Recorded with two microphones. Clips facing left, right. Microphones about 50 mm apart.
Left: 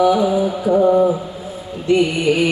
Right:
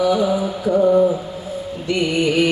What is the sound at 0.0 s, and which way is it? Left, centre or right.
Mantra, centre.